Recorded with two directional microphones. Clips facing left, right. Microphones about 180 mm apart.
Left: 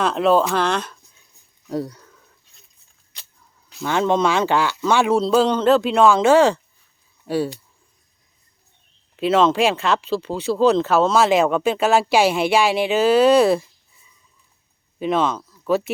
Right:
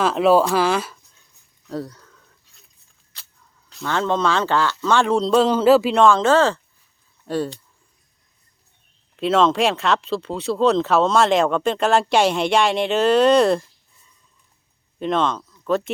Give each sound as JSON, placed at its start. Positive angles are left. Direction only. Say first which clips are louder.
{"t": 0.0, "sound": "speech", "louder": "right 1 dB", "side_deg": -5}
{"t": 1.6, "sound": "a sound", "louder": "left 3 dB", "side_deg": 15}
{"t": 3.7, "sound": "speech", "louder": "left 3 dB", "side_deg": 10}
{"t": 9.1, "sound": "speech", "louder": "left 1 dB", "side_deg": 0}